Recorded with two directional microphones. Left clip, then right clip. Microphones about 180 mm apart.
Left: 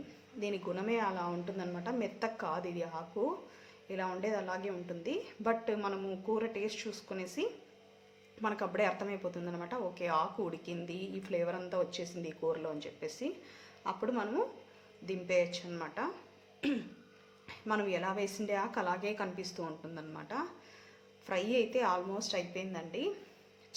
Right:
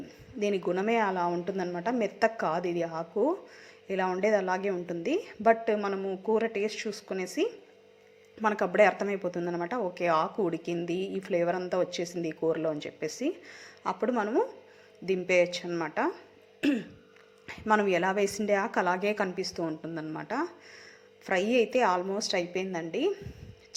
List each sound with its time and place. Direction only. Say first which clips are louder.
0.3 s speech: right 9 dB; 35° right (ahead or behind)
16.6 s throat clearing: right 7 dB; 30° right (ahead or behind)
17.4 s speech: right 9 dB; 35° right (ahead or behind)